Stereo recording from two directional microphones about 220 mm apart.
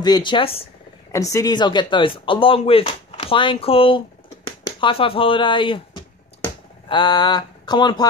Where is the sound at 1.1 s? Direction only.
15° left (ahead or behind).